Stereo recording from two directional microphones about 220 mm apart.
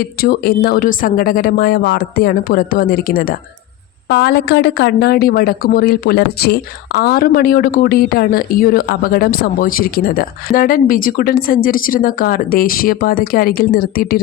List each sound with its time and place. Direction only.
0.0 s speech: 45° left (ahead or behind)